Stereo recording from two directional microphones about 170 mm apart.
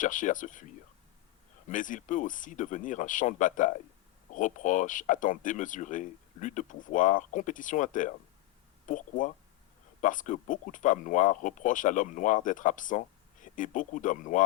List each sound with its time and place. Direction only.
0.0 s speech: 50° left (ahead or behind)
1.7 s speech: 50° left (ahead or behind)